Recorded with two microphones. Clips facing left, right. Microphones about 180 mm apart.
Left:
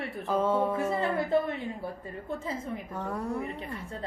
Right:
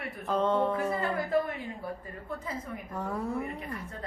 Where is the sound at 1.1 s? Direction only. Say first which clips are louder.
Left 2 dB; 25° left (ahead or behind).